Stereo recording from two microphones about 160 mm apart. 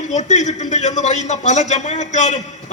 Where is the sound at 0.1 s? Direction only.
45° left (ahead or behind).